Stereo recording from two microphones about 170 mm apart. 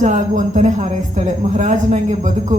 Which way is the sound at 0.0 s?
45° right (ahead or behind).